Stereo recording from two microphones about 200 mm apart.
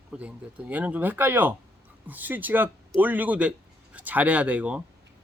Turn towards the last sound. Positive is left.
turn(degrees=-5)  # may be behind; listen again after turning